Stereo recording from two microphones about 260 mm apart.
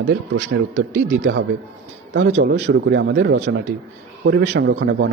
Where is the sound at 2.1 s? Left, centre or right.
Right.